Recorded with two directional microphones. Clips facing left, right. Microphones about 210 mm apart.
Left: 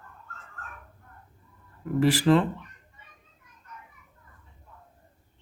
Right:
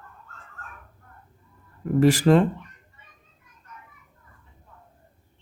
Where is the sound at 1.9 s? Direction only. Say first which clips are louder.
Right 4 dB; 45° right (ahead or behind).